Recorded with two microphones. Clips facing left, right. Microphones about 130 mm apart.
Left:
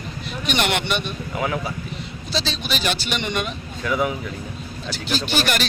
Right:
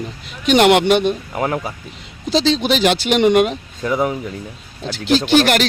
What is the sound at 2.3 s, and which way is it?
Speech, 90° right.